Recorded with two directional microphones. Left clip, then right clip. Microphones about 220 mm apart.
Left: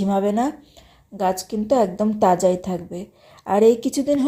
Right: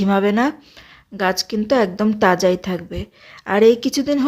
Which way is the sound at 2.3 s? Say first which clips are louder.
Right 1 dB; 35° right (ahead or behind).